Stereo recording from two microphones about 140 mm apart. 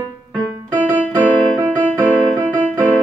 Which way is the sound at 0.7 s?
10° right (ahead or behind).